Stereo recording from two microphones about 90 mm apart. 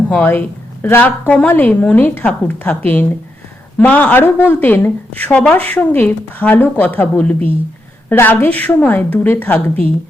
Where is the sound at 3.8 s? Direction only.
15° left (ahead or behind).